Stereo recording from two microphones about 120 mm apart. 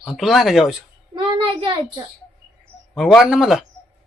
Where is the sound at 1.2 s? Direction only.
45° right (ahead or behind).